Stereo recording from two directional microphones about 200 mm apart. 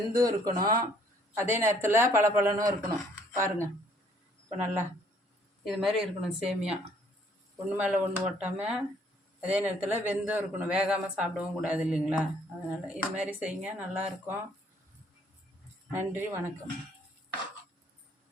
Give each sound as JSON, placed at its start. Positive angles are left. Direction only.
{"t": 0.1, "sound": "a man's voice", "side_deg": -20}
{"t": 15.9, "sound": "a man's voice", "side_deg": -10}